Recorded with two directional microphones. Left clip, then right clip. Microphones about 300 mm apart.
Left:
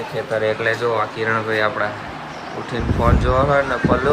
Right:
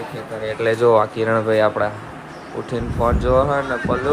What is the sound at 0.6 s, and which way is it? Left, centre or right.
Speech, centre.